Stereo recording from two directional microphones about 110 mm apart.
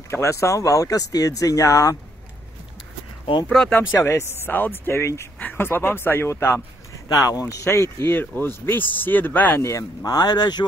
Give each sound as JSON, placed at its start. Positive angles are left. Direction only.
{"t": 0.1, "sound": "speech", "side_deg": 25}
{"t": 3.4, "sound": "speech", "side_deg": 5}
{"t": 3.7, "sound": "speech", "side_deg": 25}
{"t": 7.1, "sound": "speech", "side_deg": 35}